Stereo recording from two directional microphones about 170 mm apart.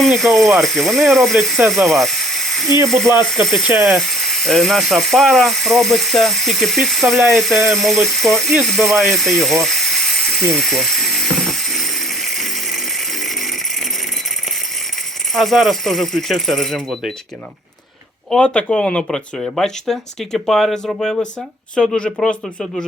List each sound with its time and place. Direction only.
0.0 s speech: centre (ahead or behind)
2.6 s speech: 20° right (ahead or behind)
3.8 s speech: centre (ahead or behind)
10.6 s a sound: centre (ahead or behind)
15.4 s speech: centre (ahead or behind)
18.3 s speech: 5° left (ahead or behind)